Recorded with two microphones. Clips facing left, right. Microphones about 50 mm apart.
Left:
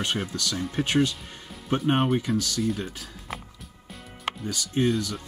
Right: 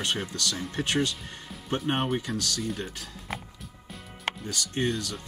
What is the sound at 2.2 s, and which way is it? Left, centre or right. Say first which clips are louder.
Speech: left 4 dB; centre.